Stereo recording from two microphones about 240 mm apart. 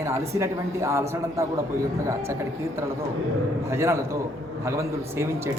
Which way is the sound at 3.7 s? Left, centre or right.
Centre.